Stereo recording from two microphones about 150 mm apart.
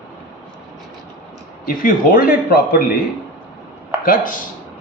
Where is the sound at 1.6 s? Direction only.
65° left (ahead or behind); by 3.0 s 80° left.